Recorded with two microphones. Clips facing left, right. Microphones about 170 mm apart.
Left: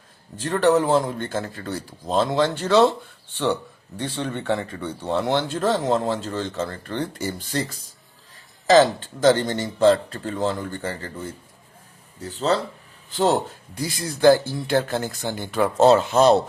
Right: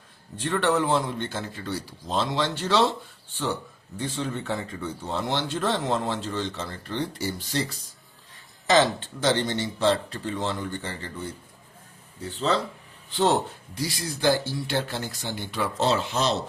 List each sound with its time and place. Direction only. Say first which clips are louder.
0.3 s speech: left 5 dB; 40° left (ahead or behind)
3.3 s speech: left 6 dB; 70° left (ahead or behind); by 7.8 s 50° left (ahead or behind)
9.0 s speech: left 7 dB; 45° left (ahead or behind)